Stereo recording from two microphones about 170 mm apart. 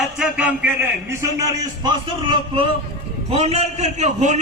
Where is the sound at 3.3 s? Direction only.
40° right (ahead or behind).